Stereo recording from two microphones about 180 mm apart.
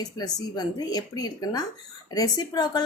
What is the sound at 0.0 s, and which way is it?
Speech, 20° left (ahead or behind).